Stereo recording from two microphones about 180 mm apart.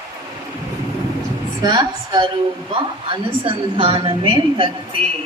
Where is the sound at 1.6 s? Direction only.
20° right (ahead or behind).